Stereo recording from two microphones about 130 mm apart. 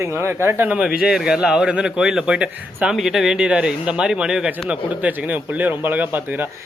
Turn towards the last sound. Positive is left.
turn(degrees=-15)  # may be behind; listen again after turning